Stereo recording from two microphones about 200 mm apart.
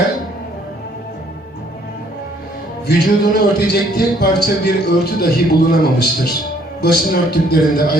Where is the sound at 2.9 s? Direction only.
45° left (ahead or behind).